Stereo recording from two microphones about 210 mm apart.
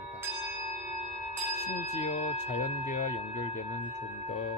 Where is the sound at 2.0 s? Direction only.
35° left (ahead or behind).